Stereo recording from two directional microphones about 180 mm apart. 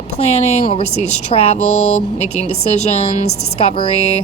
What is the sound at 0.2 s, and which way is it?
A woman's voice, 35° left (ahead or behind).